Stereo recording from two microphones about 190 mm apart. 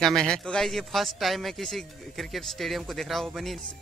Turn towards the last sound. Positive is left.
turn(degrees=0)  # may be behind; listen again after turning